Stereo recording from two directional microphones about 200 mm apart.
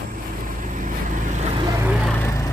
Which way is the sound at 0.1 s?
40° right (ahead or behind).